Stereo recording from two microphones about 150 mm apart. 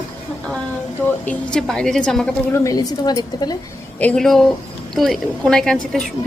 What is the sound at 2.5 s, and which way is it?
A woman's voice, 20° left (ahead or behind).